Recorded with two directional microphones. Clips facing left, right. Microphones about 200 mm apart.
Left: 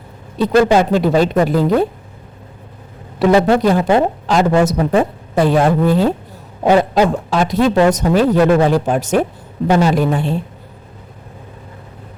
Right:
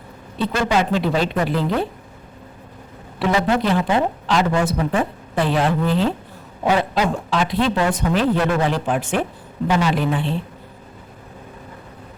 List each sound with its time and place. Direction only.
0.3 s speech: 45° left (ahead or behind)
3.2 s a woman's voice: 40° left (ahead or behind)